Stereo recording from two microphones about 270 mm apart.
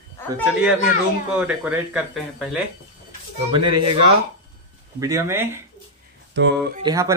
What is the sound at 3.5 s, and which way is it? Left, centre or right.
Speech, right.